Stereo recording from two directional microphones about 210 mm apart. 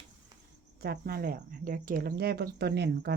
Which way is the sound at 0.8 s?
45° right (ahead or behind).